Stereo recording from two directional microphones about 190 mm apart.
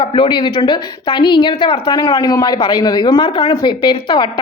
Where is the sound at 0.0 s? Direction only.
25° left (ahead or behind).